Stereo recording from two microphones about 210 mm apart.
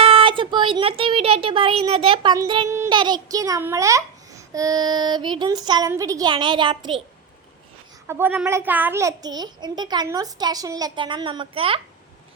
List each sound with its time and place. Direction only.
0.0 s speech: 25° right (ahead or behind)
8.0 s a child's voice: 10° right (ahead or behind); by 11.8 s 25° right (ahead or behind)